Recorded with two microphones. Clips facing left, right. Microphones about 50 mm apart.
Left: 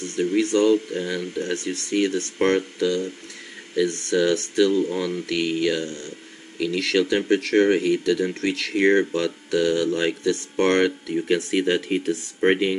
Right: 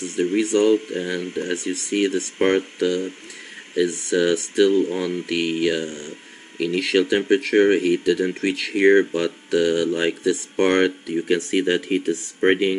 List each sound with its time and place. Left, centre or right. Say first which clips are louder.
0.4 s speech: right 1 dB; centre
5.0 s speech: right 1 dB; centre